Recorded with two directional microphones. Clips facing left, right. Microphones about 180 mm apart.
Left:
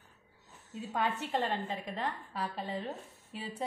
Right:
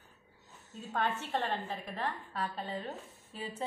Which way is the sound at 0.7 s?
5° left (ahead or behind).